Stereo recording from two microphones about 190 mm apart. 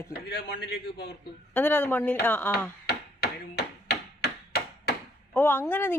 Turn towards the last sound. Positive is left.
turn(degrees=10)  # may be behind; listen again after turning